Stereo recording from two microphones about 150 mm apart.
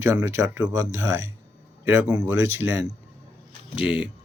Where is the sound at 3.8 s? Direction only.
5° right (ahead or behind).